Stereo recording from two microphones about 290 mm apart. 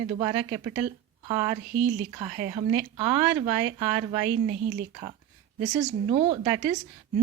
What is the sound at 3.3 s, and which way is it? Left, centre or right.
Speech, centre.